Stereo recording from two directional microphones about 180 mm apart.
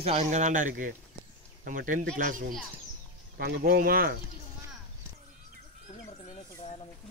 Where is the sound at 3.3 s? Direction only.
60° right (ahead or behind).